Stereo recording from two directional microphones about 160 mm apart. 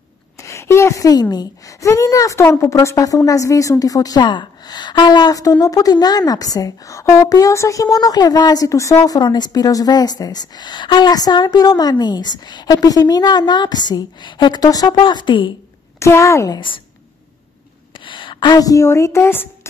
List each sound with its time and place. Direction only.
0.4 s a woman's voice: 20° left (ahead or behind)
16.0 s a woman's voice: 20° left (ahead or behind)
17.9 s a woman's voice: 30° left (ahead or behind); by 19.5 s 15° left (ahead or behind)